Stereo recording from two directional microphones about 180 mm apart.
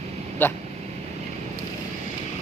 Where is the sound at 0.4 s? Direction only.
10° left (ahead or behind).